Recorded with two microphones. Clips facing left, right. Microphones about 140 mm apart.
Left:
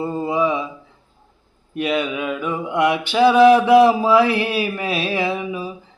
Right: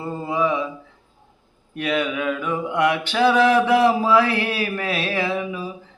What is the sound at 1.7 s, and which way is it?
Mantra, 20° left (ahead or behind).